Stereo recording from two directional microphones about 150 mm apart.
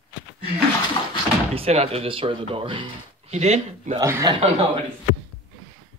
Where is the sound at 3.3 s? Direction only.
45° right (ahead or behind).